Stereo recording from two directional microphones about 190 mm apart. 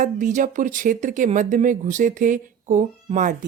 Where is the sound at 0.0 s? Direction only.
40° right (ahead or behind).